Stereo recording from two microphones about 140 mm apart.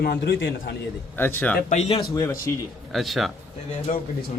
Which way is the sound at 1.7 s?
50° left (ahead or behind).